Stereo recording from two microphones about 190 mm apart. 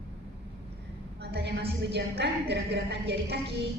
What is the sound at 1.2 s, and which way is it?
A woman's voice, 60° right (ahead or behind).